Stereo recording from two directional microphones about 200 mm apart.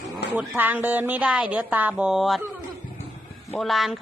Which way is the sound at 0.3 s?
10° right (ahead or behind).